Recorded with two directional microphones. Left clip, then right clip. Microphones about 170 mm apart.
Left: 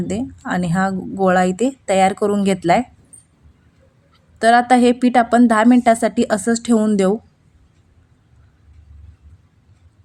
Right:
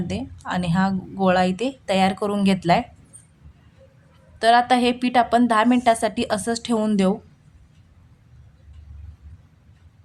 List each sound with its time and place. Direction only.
0.1 s a woman's voice: 20° left (ahead or behind)
4.4 s a woman's voice: 25° left (ahead or behind)